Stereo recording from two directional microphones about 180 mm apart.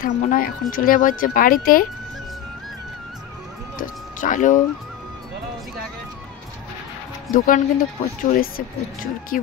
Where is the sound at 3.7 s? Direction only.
45° left (ahead or behind).